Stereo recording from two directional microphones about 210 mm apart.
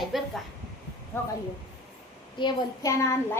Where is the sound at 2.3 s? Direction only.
20° left (ahead or behind).